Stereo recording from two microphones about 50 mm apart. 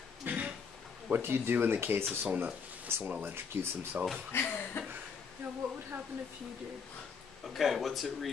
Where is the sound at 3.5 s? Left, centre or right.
Right.